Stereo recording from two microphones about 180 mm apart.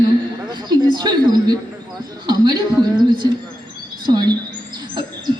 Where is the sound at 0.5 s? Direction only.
25° right (ahead or behind).